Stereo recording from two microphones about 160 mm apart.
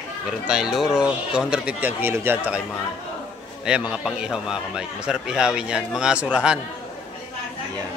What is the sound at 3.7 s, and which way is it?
A man's voice, 5° right (ahead or behind).